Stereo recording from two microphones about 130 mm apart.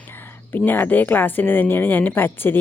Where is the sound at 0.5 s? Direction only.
15° left (ahead or behind).